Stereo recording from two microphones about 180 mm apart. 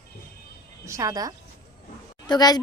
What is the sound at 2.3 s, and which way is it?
Speech, 20° left (ahead or behind).